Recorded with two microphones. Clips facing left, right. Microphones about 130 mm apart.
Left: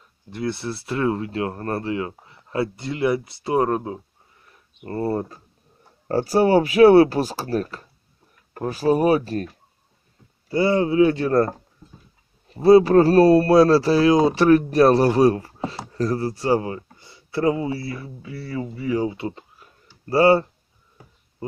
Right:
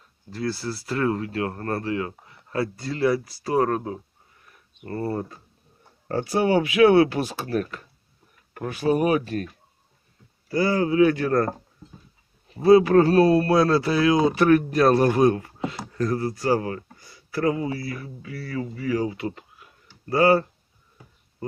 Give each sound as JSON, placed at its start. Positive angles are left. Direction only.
{"t": 0.3, "sound": "speech", "side_deg": 20}
{"t": 10.5, "sound": "speech", "side_deg": 25}
{"t": 12.6, "sound": "speech", "side_deg": 35}